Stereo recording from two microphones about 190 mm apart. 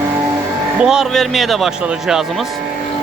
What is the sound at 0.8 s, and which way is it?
Speech, 5° right (ahead or behind).